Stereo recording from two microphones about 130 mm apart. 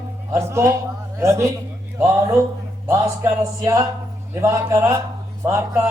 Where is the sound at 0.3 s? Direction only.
20° right (ahead or behind).